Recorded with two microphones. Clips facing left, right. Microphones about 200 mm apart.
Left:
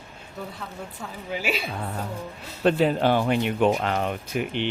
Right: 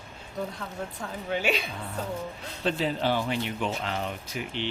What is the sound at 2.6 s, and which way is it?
Speech, 55° left (ahead or behind).